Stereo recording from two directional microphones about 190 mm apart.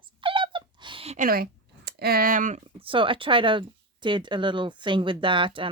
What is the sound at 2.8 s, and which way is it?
Speech, 25° right (ahead or behind).